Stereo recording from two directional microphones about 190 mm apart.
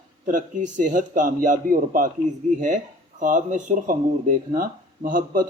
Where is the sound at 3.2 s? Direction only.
40° right (ahead or behind).